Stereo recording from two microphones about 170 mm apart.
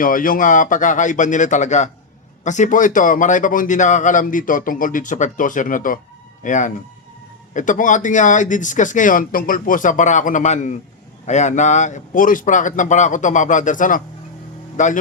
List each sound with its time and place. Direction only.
0.0 s a man's voice: 55° left (ahead or behind)